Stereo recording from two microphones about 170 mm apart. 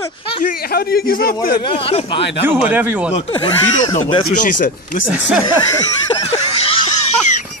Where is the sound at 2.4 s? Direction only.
10° right (ahead or behind).